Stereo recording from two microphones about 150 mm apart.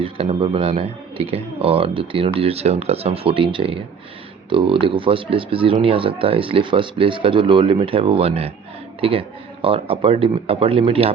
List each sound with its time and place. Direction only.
0.0 s speech: 40° right (ahead or behind)